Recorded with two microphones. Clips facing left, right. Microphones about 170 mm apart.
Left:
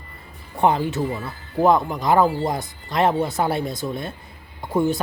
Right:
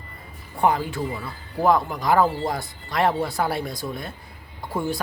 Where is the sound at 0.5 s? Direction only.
20° left (ahead or behind).